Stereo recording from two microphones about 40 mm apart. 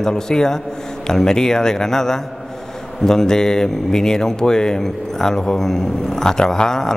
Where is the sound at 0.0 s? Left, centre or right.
Centre.